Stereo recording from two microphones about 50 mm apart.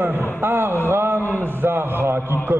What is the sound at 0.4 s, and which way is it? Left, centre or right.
Speech, right.